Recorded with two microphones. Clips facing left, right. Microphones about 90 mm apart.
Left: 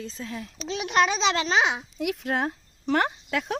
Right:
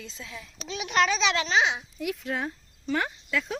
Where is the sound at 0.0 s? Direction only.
40° left (ahead or behind).